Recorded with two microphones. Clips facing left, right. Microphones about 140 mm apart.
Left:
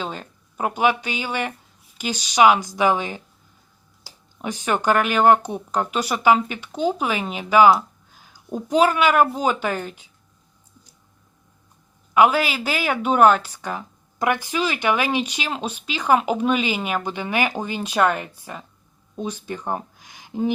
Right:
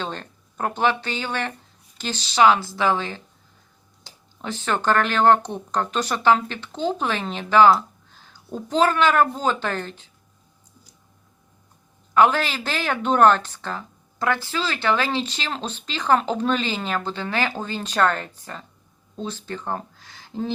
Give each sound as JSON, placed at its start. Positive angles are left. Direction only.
{"t": 0.0, "sound": "a woman's voice", "side_deg": 5}
{"t": 12.1, "sound": "a woman's voice", "side_deg": 10}